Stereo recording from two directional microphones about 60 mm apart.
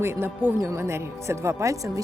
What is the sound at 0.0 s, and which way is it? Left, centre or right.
Speech, right.